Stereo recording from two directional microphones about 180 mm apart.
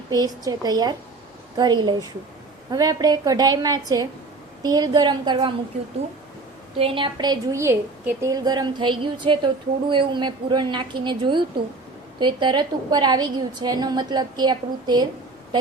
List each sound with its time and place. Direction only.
0.1 s a woman's voice: 20° right (ahead or behind)
6.7 s a woman's voice: 30° right (ahead or behind)